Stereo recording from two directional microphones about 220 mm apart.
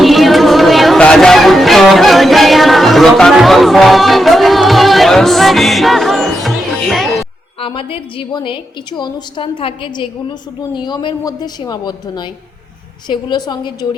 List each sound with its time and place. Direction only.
0.0 s music: centre (ahead or behind)
7.6 s a woman's voice: 25° left (ahead or behind)